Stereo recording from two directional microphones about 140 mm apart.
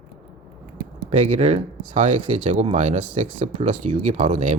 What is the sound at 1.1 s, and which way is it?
Speech, 55° right (ahead or behind).